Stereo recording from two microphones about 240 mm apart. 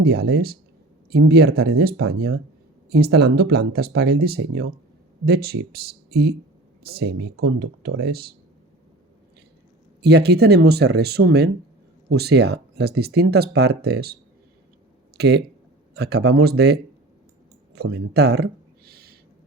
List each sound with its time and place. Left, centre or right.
0.0 s speech: right
10.0 s speech: right
15.2 s speech: right
18.9 s owl: right